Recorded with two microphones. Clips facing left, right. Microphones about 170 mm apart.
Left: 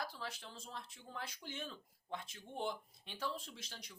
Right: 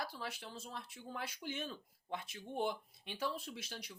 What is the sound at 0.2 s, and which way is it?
Speech, 10° right (ahead or behind).